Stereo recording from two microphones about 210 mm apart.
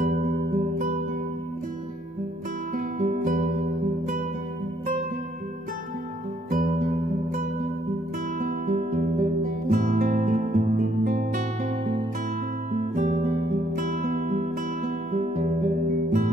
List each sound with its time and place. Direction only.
0.0 s music: 40° right (ahead or behind)
2.7 s music: 40° right (ahead or behind)
6.5 s music: 40° right (ahead or behind)
8.4 s music: 40° right (ahead or behind)
12.7 s music: 40° right (ahead or behind)